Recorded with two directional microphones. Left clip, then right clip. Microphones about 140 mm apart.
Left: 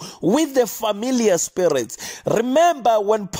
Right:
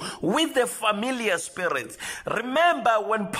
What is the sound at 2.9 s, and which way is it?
Speech, 40° left (ahead or behind).